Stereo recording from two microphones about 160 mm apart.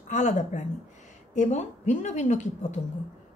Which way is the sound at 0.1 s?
50° left (ahead or behind).